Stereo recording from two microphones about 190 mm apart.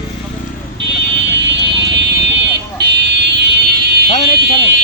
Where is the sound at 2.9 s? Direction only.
65° right (ahead or behind).